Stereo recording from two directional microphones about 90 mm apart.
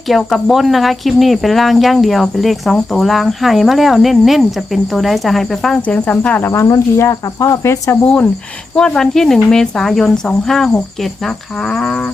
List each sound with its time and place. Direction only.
0.1 s speech: centre (ahead or behind)
5.8 s speech: 15° left (ahead or behind)
6.5 s speech: 35° left (ahead or behind)
8.0 s speech: 15° left (ahead or behind)